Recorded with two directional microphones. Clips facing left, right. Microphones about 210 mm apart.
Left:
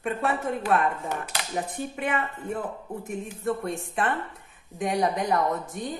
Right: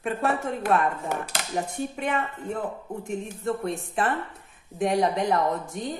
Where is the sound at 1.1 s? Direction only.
45° right (ahead or behind).